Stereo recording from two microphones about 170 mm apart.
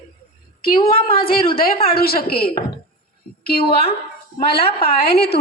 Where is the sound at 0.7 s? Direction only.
30° left (ahead or behind).